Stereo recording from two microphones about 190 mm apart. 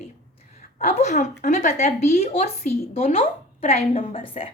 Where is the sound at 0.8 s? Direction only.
35° left (ahead or behind).